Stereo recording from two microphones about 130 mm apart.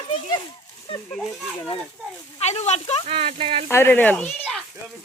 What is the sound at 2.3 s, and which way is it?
Speech, 60° left (ahead or behind).